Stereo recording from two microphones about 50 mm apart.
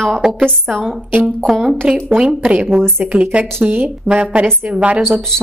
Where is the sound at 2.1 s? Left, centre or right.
Centre.